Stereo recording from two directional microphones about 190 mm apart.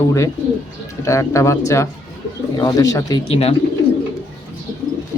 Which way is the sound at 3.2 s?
30° left (ahead or behind).